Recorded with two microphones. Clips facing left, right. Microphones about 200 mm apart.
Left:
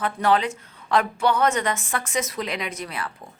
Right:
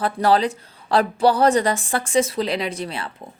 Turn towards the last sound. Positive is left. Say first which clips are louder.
# right 3 dB
turn(degrees=-25)  # may be behind; listen again after turning